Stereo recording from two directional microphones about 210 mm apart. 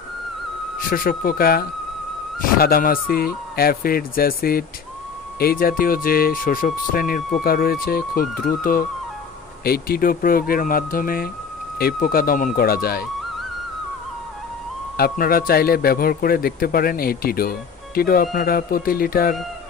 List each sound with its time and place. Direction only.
0.7 s speech: 40° left (ahead or behind)
15.0 s speech: 45° left (ahead or behind)